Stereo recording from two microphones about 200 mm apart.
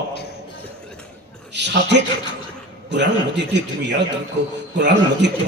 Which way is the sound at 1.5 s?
60° right (ahead or behind).